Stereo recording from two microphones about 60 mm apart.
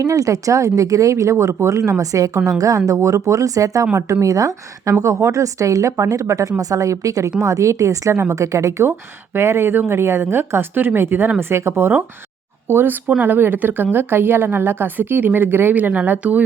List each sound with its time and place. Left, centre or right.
0.0 s a woman's voice: right
1.1 s a woman's voice: right
3.9 s a woman's voice: right
4.3 s a woman's voice: right
8.8 s a woman's voice: right